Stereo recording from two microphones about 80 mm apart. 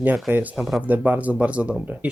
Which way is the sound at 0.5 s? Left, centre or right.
Centre.